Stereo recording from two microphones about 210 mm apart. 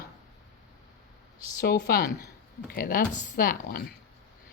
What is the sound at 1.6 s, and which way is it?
A woman's voice, 45° left (ahead or behind).